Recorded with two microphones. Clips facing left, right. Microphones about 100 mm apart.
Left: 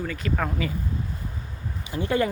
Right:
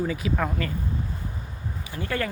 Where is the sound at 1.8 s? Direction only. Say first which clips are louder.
Left 5 dB; 20° left (ahead or behind).